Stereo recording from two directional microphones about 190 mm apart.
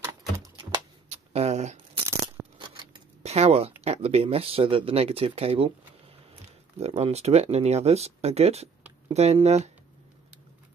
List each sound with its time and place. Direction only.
0.6 s a sound: 30° right (ahead or behind)
2.6 s scissors: 30° right (ahead or behind)
3.8 s speech: 35° right (ahead or behind)
6.8 s speech: 35° right (ahead or behind)